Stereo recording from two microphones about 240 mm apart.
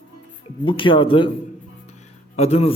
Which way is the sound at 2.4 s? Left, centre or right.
Left.